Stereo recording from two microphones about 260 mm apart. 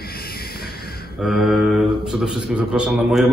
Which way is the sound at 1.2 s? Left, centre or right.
Centre.